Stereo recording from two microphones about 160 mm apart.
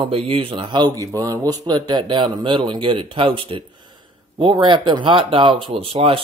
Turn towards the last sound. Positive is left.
turn(degrees=-35)  # may be behind; listen again after turning